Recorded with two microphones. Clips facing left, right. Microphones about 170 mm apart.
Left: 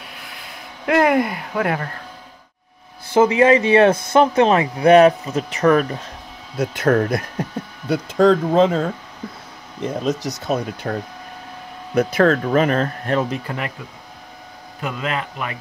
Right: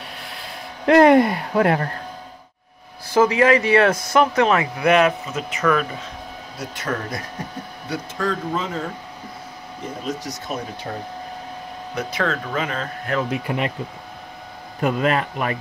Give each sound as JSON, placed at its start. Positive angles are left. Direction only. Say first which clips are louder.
{"t": 0.8, "sound": "speech", "louder": "right 4 dB", "side_deg": -30}
{"t": 3.1, "sound": "speech", "louder": "left 2 dB", "side_deg": 25}
{"t": 6.6, "sound": "speech", "louder": "left 10 dB", "side_deg": 55}
{"t": 7.9, "sound": "speech", "louder": "left 10 dB", "side_deg": 80}
{"t": 10.0, "sound": "speech", "louder": "left 6 dB", "side_deg": 90}
{"t": 10.9, "sound": "speech", "louder": "left 7 dB", "side_deg": 65}
{"t": 11.9, "sound": "speech", "louder": "left 9 dB", "side_deg": 50}
{"t": 13.5, "sound": "speech", "louder": "right 4 dB", "side_deg": -15}
{"t": 14.8, "sound": "speech", "louder": "right 5 dB", "side_deg": -45}